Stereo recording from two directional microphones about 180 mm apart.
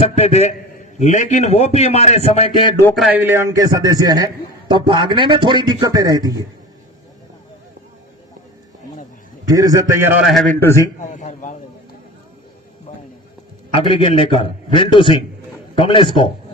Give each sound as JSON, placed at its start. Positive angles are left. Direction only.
{"t": 0.0, "sound": "a man's voice", "side_deg": 35}
{"t": 2.9, "sound": "a man's voice", "side_deg": -5}
{"t": 9.5, "sound": "a man's voice", "side_deg": -20}
{"t": 10.6, "sound": "a man's voice", "side_deg": 15}
{"t": 11.1, "sound": "a man's voice", "side_deg": 40}
{"t": 13.7, "sound": "a man's voice", "side_deg": 25}